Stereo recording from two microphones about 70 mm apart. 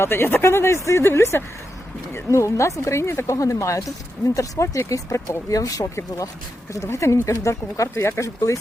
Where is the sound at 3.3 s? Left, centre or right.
Left.